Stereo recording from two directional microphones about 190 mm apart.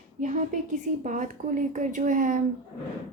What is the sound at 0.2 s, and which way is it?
Speech, 40° right (ahead or behind).